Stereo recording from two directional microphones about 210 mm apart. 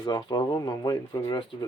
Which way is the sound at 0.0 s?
20° left (ahead or behind).